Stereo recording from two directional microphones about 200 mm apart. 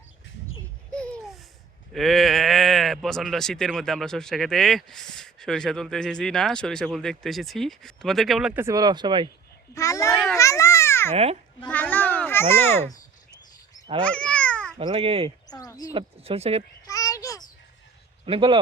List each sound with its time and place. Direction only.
0.9 s baby laughter: 5° left (ahead or behind)
1.9 s speech: centre (ahead or behind); by 9.3 s 25° right (ahead or behind)
9.7 s a child's voice: 15° left (ahead or behind)
10.3 s babbling: 15° left (ahead or behind)
11.1 s speech: 30° right (ahead or behind)
11.7 s a sound: 10° left (ahead or behind)
14.0 s cat: 5° left (ahead or behind)
14.8 s speech: 30° right (ahead or behind)
15.4 s a sound: 20° left (ahead or behind)
15.9 s speech: 30° right (ahead or behind)
16.8 s a sound: 15° left (ahead or behind)
18.3 s speech: 25° right (ahead or behind)